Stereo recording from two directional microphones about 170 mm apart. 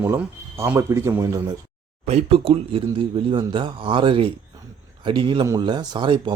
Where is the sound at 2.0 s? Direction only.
35° right (ahead or behind).